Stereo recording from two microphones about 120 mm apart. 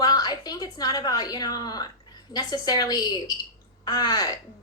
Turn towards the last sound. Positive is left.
turn(degrees=35)  # may be behind; listen again after turning